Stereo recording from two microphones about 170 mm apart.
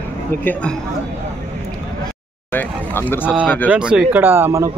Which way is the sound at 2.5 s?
10° left (ahead or behind).